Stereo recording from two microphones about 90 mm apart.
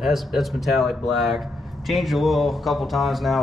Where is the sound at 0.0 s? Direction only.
Centre (ahead or behind).